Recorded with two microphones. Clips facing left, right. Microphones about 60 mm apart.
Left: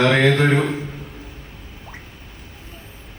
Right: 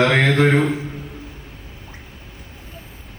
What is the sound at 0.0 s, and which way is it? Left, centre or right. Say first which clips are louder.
Speech: even; right.